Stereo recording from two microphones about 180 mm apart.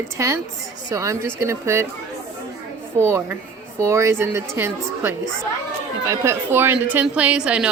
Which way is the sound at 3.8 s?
15° right (ahead or behind).